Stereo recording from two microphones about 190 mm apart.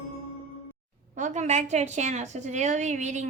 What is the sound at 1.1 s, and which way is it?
A woman's voice, 40° right (ahead or behind).